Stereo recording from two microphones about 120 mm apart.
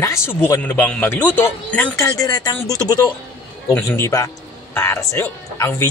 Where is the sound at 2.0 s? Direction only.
30° left (ahead or behind).